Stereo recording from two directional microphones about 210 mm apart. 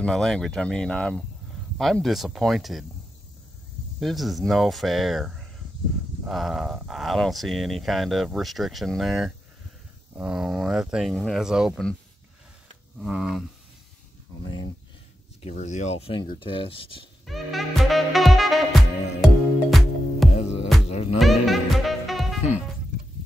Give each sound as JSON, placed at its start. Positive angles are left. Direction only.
{"t": 0.0, "sound": "speech", "side_deg": 5}
{"t": 4.0, "sound": "speech", "side_deg": 0}
{"t": 13.0, "sound": "speech", "side_deg": -5}
{"t": 15.4, "sound": "speech", "side_deg": 35}
{"t": 17.3, "sound": "music", "side_deg": 0}